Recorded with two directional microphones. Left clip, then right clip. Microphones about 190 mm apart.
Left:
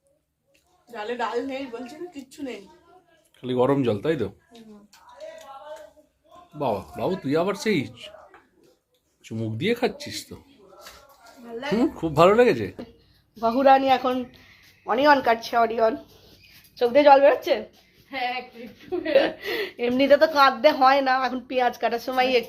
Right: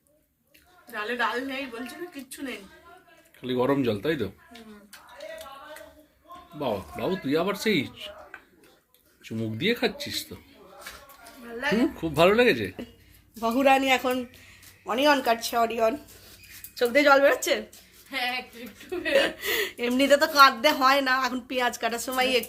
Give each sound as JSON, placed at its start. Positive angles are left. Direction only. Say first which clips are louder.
{"t": 0.9, "sound": "a woman's voice", "louder": "even", "side_deg": -15}
{"t": 3.4, "sound": "speech", "louder": "left 3 dB", "side_deg": 0}
{"t": 6.6, "sound": "speech", "louder": "left 3 dB", "side_deg": 0}
{"t": 9.2, "sound": "speech", "louder": "left 1 dB", "side_deg": 0}
{"t": 11.8, "sound": "speech", "louder": "left 4 dB", "side_deg": 0}
{"t": 13.4, "sound": "a woman's voice", "louder": "left 4 dB", "side_deg": -15}